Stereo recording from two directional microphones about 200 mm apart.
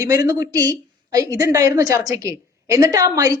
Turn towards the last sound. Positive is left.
turn(degrees=-15)  # may be behind; listen again after turning